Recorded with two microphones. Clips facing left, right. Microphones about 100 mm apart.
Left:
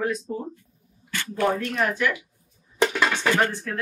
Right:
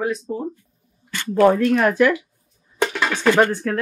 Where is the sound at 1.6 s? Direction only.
50° right (ahead or behind).